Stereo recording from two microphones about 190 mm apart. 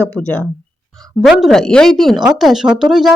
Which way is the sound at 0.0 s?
5° left (ahead or behind).